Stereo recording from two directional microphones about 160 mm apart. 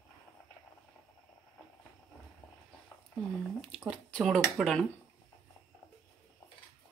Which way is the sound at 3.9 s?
Centre (ahead or behind).